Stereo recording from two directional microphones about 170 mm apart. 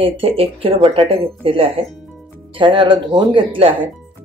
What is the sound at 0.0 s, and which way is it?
Speech, 35° right (ahead or behind).